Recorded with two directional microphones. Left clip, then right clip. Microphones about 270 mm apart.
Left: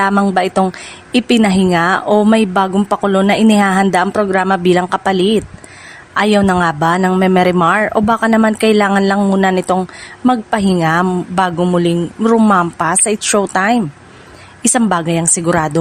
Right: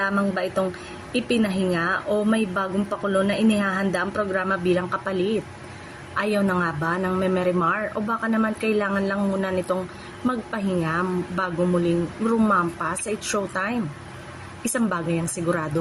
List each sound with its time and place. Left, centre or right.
0.0 s a woman's voice: left
6.1 s a woman's voice: left